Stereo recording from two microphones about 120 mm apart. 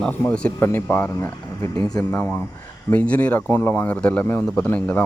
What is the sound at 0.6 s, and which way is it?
Speech, 20° left (ahead or behind).